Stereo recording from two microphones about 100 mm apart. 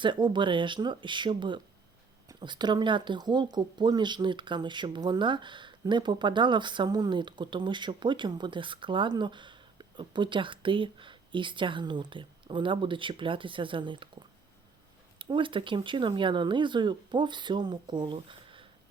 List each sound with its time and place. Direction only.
0.0 s speech: 50° right (ahead or behind)